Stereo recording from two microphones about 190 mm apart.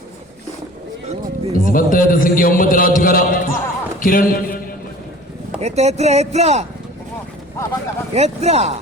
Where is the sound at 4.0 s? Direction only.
45° left (ahead or behind).